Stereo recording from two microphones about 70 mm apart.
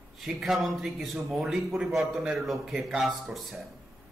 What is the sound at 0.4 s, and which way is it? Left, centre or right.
Speech, centre.